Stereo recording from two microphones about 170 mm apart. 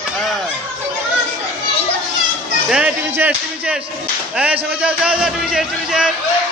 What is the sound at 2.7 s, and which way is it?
A man's voice, 10° right (ahead or behind).